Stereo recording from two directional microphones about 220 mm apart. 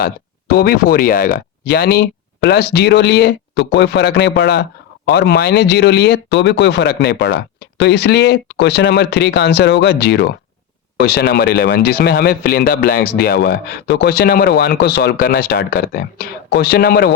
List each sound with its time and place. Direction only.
0.5 s speech: 45° left (ahead or behind)